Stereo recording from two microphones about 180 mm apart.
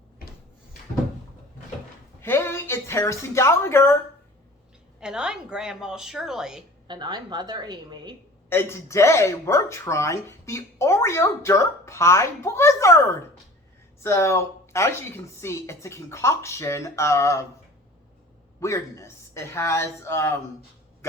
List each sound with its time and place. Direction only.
2.2 s a woman's voice: 15° left (ahead or behind)
4.9 s a woman's voice: 5° right (ahead or behind)
6.8 s a woman's voice: 25° right (ahead or behind)
8.4 s speech: 15° left (ahead or behind)
14.0 s speech: 15° left (ahead or behind)
18.6 s speech: 15° left (ahead or behind)